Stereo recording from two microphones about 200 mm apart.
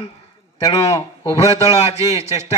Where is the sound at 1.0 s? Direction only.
30° left (ahead or behind).